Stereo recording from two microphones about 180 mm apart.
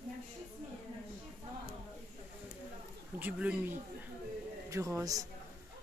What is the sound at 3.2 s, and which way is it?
A woman's voice, 10° right (ahead or behind).